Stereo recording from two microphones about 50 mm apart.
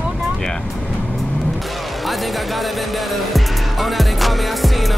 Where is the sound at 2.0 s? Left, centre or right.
Centre.